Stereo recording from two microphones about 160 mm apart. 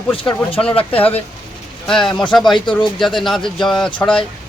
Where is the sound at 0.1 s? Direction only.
35° left (ahead or behind).